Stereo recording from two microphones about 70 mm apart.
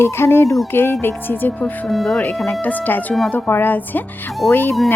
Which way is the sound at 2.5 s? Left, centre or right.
Left.